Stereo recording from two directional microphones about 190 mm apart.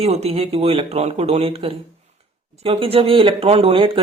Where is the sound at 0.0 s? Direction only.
35° right (ahead or behind).